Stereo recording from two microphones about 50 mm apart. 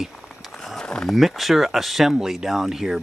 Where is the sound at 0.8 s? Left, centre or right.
Centre.